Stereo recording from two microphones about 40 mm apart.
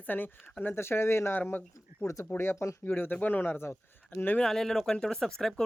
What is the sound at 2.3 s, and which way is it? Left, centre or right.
Speech, left.